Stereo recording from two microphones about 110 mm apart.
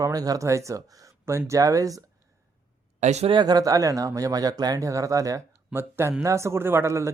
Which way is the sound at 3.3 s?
40° right (ahead or behind).